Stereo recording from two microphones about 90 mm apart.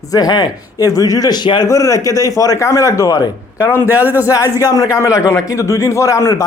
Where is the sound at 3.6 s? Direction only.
30° left (ahead or behind).